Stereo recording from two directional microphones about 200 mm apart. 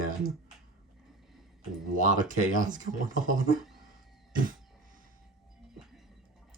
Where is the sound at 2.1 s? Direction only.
40° right (ahead or behind).